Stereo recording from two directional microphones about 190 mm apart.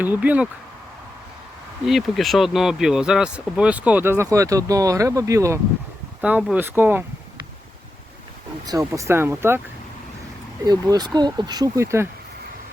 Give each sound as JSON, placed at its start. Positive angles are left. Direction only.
{"t": 0.0, "sound": "speech", "side_deg": -10}
{"t": 1.9, "sound": "speech", "side_deg": 0}
{"t": 8.6, "sound": "speech", "side_deg": -20}
{"t": 10.7, "sound": "speech", "side_deg": -20}